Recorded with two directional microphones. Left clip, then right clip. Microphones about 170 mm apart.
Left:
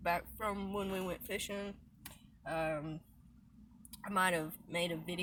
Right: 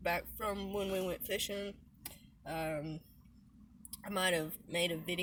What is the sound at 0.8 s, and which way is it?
Speech, 20° right (ahead or behind).